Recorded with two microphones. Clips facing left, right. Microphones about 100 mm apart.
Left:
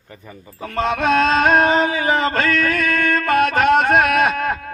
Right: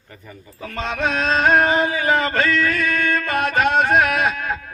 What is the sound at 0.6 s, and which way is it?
Music, 45° left (ahead or behind).